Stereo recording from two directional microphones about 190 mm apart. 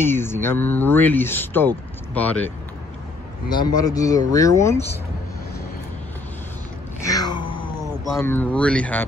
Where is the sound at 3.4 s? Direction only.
20° left (ahead or behind).